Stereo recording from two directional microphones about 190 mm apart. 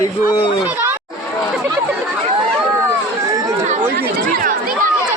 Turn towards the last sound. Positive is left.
turn(degrees=-45)  # may be behind; listen again after turning